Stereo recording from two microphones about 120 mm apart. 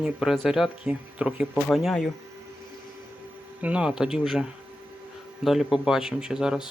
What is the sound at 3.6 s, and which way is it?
Speech, 10° right (ahead or behind).